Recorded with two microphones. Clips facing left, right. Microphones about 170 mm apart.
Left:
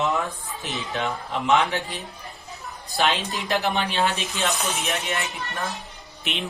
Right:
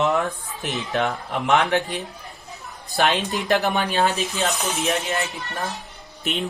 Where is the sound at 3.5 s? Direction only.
50° right (ahead or behind).